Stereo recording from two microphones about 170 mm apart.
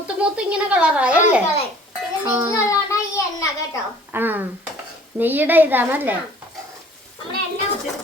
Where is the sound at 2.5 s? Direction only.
15° left (ahead or behind).